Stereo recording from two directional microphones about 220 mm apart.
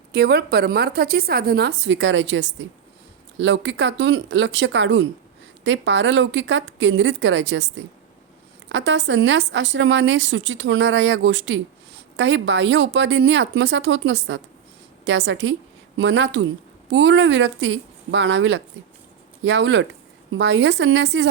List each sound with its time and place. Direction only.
0.1 s a woman's voice: 45° right (ahead or behind)